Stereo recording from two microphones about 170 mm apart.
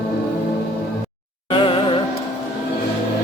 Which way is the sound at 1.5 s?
30° left (ahead or behind).